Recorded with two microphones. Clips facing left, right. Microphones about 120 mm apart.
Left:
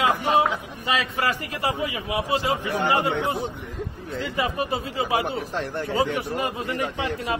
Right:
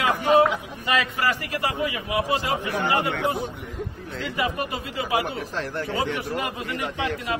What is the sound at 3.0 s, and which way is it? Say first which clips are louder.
Speech: left 1 dB; 25° left (ahead or behind).